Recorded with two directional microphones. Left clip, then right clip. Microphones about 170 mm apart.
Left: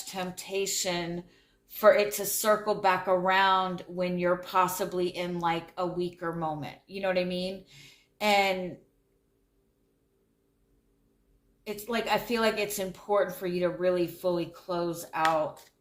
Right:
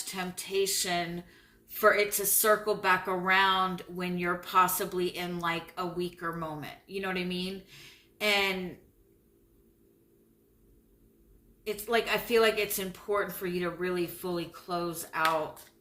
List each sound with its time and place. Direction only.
0.1 s speech: 20° left (ahead or behind)
2.1 s speech: 20° left (ahead or behind)
11.6 s speech: 20° left (ahead or behind)